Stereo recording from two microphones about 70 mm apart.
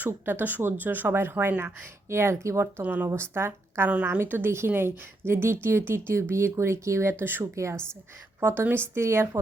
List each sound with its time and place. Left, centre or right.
0.0 s speech: right
2.8 s speech: right
3.1 s speech: right
7.5 s a woman's voice: right
8.4 s a woman's voice: right